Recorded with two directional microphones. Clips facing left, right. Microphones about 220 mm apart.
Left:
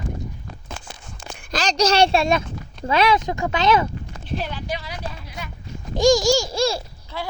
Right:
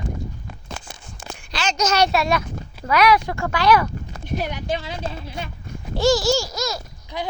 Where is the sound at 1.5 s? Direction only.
35° left (ahead or behind).